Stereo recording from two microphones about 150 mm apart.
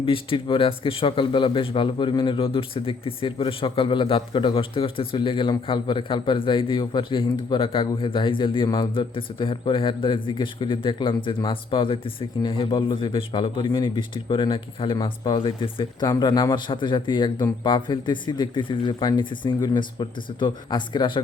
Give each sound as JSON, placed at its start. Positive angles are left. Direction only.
{"t": 0.0, "sound": "speech", "side_deg": 35}